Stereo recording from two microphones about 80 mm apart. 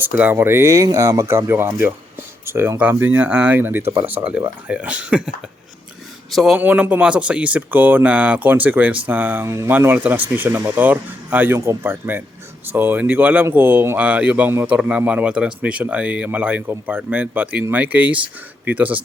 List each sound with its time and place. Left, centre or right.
0.0 s speech: right
1.3 s speech: right; by 5.3 s centre
6.3 s speech: centre
6.6 s speech: right
9.5 s speech: right
9.8 s speech: right
14.8 s speech: centre